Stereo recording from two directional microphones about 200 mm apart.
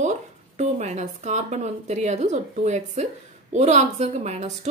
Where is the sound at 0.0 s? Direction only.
35° right (ahead or behind).